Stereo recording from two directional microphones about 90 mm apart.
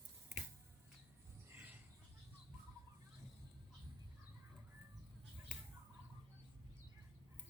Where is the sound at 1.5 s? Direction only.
20° right (ahead or behind).